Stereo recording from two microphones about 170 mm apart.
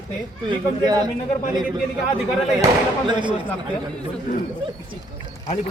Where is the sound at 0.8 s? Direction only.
25° right (ahead or behind).